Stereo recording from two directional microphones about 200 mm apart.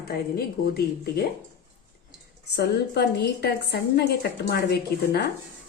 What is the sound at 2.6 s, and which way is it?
A woman's voice, 55° left (ahead or behind).